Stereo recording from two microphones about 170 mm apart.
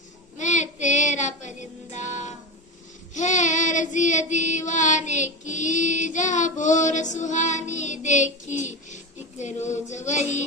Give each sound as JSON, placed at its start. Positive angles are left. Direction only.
{"t": 0.3, "sound": "child singing", "side_deg": 45}
{"t": 9.4, "sound": "female singing", "side_deg": 45}